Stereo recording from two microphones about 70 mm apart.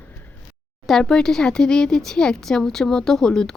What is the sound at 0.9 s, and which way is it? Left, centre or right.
Speech, centre.